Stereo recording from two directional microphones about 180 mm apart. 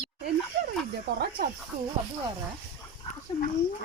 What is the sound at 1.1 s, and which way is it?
Speech, 70° right (ahead or behind).